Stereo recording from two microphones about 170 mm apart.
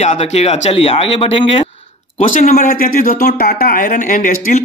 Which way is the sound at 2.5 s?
55° left (ahead or behind).